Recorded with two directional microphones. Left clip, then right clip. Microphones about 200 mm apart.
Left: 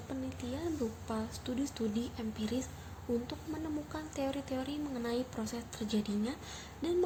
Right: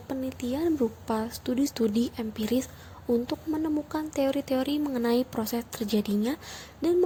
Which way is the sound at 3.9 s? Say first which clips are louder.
Right 10 dB; 35° right (ahead or behind).